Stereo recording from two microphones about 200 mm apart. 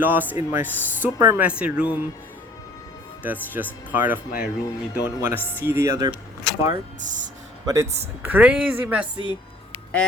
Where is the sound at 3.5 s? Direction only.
10° right (ahead or behind).